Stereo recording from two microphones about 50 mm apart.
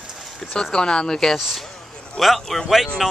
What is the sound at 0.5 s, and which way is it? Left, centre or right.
Speech, centre.